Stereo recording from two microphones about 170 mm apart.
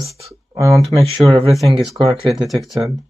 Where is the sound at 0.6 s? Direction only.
20° right (ahead or behind).